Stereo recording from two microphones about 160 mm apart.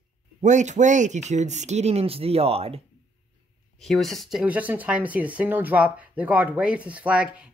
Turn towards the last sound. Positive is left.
turn(degrees=-5)  # may be behind; listen again after turning